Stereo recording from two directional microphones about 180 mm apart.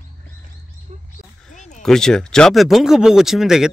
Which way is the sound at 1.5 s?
45° left (ahead or behind).